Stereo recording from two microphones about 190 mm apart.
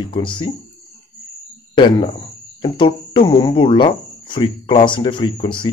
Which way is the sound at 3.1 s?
20° left (ahead or behind).